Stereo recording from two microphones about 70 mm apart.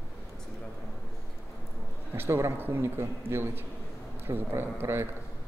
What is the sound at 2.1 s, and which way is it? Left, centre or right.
A man's voice, right.